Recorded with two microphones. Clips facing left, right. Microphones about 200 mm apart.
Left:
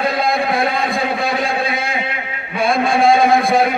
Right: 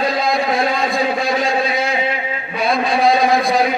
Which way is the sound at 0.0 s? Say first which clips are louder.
Even; 55° left (ahead or behind).